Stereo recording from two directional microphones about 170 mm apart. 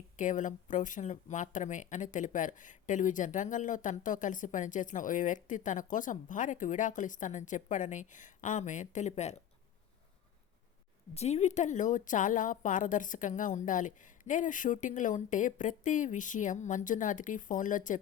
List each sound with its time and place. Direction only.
0.2 s speech: 50° left (ahead or behind)
11.1 s speech: 40° left (ahead or behind)